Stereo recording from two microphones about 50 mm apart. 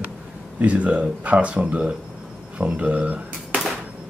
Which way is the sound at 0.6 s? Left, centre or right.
Right.